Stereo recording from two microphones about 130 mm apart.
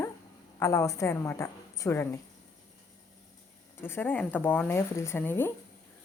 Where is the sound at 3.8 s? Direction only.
15° left (ahead or behind).